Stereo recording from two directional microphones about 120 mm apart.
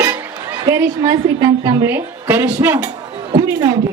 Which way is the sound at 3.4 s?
35° right (ahead or behind).